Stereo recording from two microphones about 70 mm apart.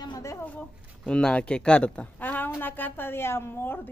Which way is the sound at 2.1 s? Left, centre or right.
Left.